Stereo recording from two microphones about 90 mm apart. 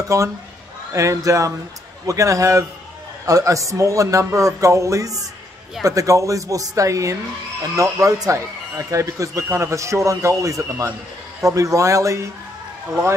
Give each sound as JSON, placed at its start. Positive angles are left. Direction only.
{"t": 0.1, "sound": "a man's voice", "side_deg": -35}